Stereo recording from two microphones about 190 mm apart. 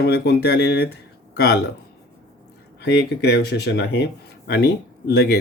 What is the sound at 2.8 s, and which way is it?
Speech, 55° left (ahead or behind).